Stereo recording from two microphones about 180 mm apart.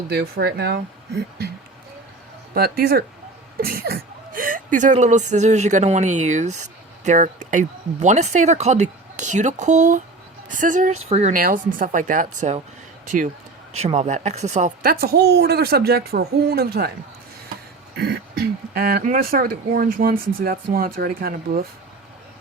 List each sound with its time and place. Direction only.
0.1 s speech: 65° right (ahead or behind)
2.6 s speech: 60° right (ahead or behind); by 11.3 s 40° right (ahead or behind)
11.3 s speech: 50° right (ahead or behind)
17.9 s a sound: 60° right (ahead or behind)
18.7 s speech: 55° right (ahead or behind)